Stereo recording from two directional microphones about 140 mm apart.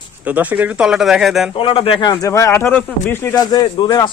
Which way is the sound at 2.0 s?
25° left (ahead or behind).